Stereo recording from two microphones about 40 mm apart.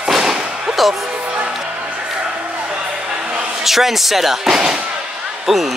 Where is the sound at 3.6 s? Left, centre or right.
Centre.